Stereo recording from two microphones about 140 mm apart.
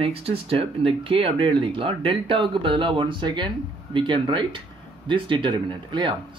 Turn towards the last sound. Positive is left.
turn(degrees=-35)  # may be behind; listen again after turning